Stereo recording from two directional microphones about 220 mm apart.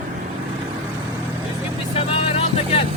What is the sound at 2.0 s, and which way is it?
Vehicle, 25° left (ahead or behind).